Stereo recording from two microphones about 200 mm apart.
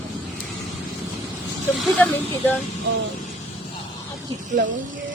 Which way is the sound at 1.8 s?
5° left (ahead or behind).